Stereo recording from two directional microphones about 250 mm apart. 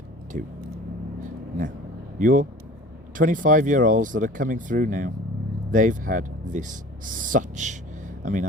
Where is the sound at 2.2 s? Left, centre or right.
Right.